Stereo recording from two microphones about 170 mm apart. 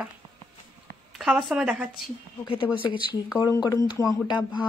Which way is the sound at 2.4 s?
30° left (ahead or behind).